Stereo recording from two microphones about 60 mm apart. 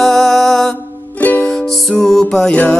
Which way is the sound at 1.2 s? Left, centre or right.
Left.